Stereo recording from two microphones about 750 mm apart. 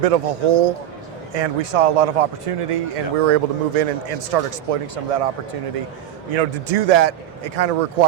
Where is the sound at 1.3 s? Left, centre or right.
Right.